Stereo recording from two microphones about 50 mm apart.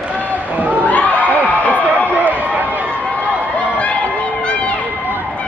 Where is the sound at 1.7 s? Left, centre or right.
Left.